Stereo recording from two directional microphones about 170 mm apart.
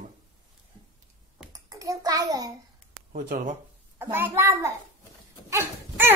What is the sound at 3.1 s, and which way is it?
Speech, 50° right (ahead or behind).